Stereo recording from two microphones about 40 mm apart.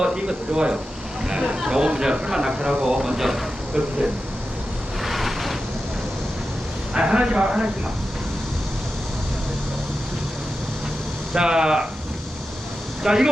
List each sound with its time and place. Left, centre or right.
0.0 s speech: centre
5.0 s a sound: centre
6.9 s speech: right
11.3 s speech: centre
13.0 s speech: centre